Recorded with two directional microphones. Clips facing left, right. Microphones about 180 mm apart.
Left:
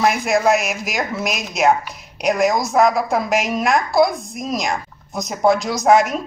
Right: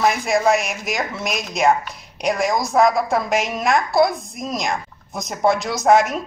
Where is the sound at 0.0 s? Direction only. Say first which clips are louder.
Left 1 dB; 5° left (ahead or behind).